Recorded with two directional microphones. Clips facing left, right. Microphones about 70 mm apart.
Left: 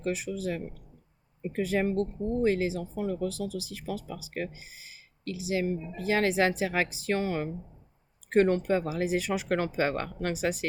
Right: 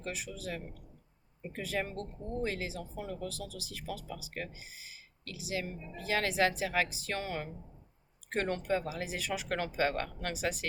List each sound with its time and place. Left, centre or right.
0.0 s speech: left